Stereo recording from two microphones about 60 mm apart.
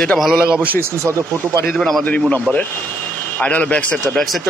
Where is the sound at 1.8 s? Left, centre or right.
Centre.